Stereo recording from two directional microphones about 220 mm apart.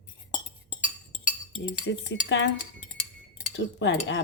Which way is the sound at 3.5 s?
50° left (ahead or behind).